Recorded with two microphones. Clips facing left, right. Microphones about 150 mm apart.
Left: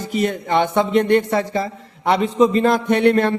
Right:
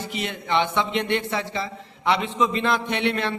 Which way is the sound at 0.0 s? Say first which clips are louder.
Left 9 dB; 45° left (ahead or behind).